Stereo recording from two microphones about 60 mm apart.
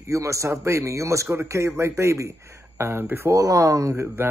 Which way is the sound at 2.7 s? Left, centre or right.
Right.